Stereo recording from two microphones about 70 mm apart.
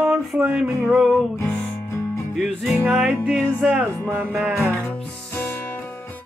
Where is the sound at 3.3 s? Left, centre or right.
Centre.